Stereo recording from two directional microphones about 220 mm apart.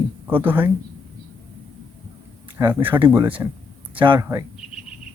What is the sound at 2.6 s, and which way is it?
Speech, 15° right (ahead or behind).